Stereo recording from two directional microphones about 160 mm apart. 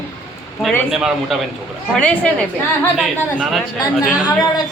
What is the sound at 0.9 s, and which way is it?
Music, 5° right (ahead or behind).